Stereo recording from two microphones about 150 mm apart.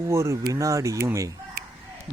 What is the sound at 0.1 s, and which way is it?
Speech, 20° right (ahead or behind).